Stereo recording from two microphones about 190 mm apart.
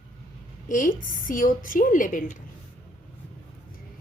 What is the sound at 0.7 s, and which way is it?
A woman's voice, 45° left (ahead or behind).